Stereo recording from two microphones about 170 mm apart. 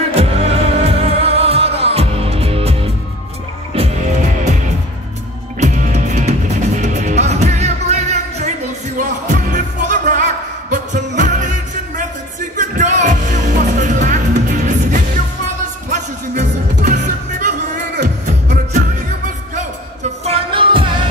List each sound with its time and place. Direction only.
0.1 s music: 35° right (ahead or behind)
8.9 s music: 50° right (ahead or behind)
12.5 s music: 45° right (ahead or behind)
18.0 s music: 45° right (ahead or behind); by 21.0 s 30° right (ahead or behind)